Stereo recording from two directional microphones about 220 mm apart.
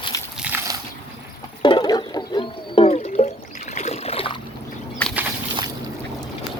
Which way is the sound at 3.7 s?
30° left (ahead or behind).